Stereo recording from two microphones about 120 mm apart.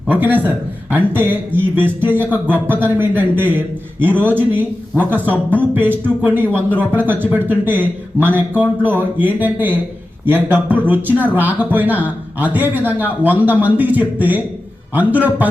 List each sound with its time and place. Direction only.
0.1 s speech: 15° right (ahead or behind)